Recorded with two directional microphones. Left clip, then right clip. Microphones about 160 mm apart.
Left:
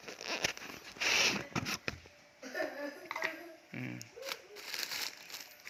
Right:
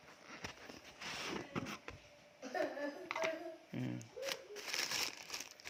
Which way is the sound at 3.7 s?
20° right (ahead or behind).